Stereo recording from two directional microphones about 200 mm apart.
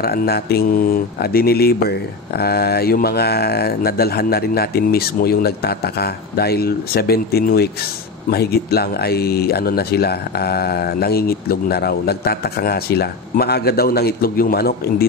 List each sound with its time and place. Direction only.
0.0 s speech: 50° left (ahead or behind)